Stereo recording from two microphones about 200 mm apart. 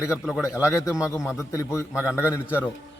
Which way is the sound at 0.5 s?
15° left (ahead or behind).